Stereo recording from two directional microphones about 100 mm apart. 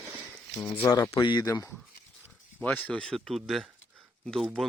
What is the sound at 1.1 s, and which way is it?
Speech, 50° left (ahead or behind).